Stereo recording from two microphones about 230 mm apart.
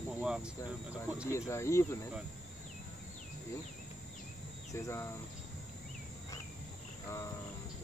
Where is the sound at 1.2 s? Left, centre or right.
Centre.